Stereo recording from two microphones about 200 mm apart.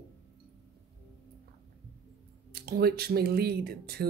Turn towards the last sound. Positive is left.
turn(degrees=-50)  # may be behind; listen again after turning